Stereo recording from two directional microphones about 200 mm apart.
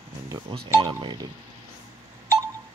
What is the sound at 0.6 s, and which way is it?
Speech, 15° right (ahead or behind).